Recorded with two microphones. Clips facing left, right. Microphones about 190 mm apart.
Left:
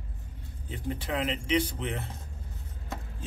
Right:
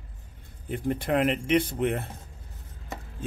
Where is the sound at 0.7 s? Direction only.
50° right (ahead or behind).